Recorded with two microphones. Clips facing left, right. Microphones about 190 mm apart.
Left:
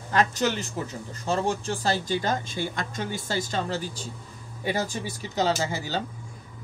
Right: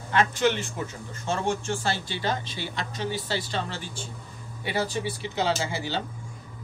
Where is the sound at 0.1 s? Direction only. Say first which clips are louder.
Right 1 dB; 40° left (ahead or behind).